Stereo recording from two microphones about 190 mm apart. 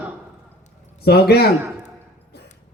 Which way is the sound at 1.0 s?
60° left (ahead or behind).